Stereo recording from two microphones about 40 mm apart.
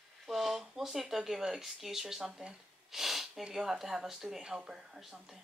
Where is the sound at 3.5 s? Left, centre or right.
Centre.